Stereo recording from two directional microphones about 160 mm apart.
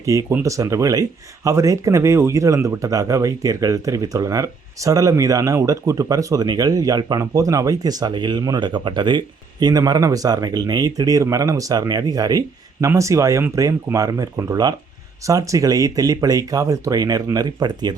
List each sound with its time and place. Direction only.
0.0 s a man's voice: 20° right (ahead or behind)